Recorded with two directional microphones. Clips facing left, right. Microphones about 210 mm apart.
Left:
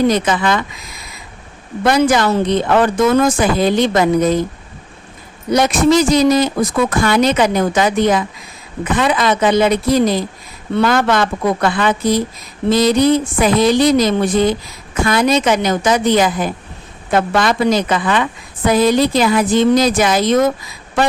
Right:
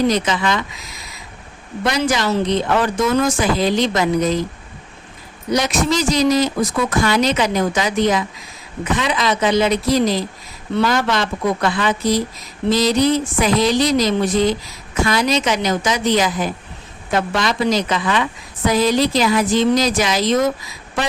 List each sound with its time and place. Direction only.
0.1 s a woman's voice: 55° left (ahead or behind)
1.8 s a woman's voice: 55° left (ahead or behind)
5.5 s a woman's voice: 55° left (ahead or behind)